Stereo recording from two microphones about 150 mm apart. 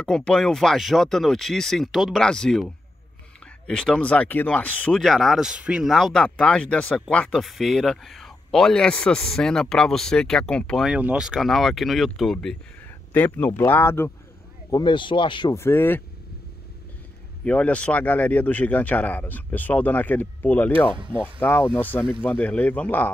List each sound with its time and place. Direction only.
0.0 s speech: 5° left (ahead or behind)
10.9 s speech: 5° right (ahead or behind); by 14.1 s 15° left (ahead or behind)
14.7 s speech: 30° left (ahead or behind)
15.5 s speech: 15° left (ahead or behind)
17.5 s speech: 10° left (ahead or behind)